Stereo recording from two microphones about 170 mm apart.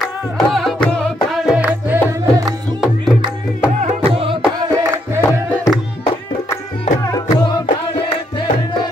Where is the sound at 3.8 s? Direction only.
35° right (ahead or behind).